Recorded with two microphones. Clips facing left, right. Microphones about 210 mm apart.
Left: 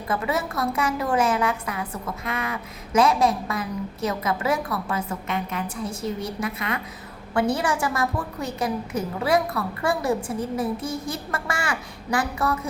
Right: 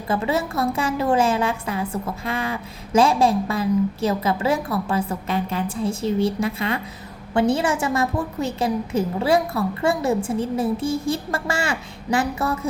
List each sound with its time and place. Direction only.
0.1 s a woman's voice: 25° right (ahead or behind)